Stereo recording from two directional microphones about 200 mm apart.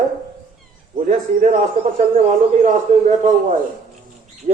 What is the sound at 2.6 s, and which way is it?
Speech, 35° right (ahead or behind).